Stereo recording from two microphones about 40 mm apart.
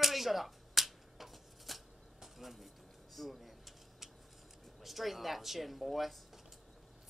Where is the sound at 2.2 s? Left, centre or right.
Centre.